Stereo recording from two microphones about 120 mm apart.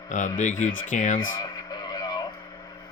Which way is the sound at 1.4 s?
35° left (ahead or behind).